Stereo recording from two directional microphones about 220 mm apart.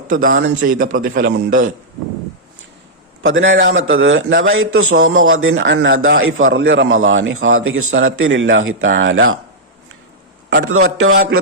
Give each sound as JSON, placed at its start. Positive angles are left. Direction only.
{"t": 0.1, "sound": "a man's voice", "side_deg": -40}
{"t": 1.5, "sound": "a man's voice", "side_deg": -35}
{"t": 3.2, "sound": "a man's voice", "side_deg": -60}
{"t": 3.8, "sound": "a man's voice", "side_deg": -65}
{"t": 10.5, "sound": "a man's voice", "side_deg": -70}
{"t": 11.1, "sound": "music", "side_deg": -45}